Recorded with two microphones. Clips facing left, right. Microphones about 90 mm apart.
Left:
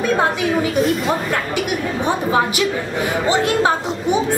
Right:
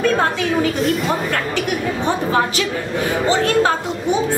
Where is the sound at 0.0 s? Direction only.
15° left (ahead or behind).